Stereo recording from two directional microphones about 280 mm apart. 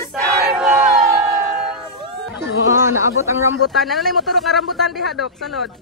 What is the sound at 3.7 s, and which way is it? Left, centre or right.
Speech, centre.